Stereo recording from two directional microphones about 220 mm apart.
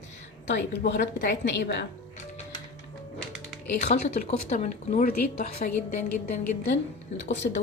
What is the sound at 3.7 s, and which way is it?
A woman's voice, 30° left (ahead or behind).